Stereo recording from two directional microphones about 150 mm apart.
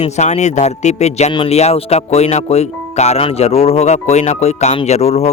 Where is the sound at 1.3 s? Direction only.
30° left (ahead or behind).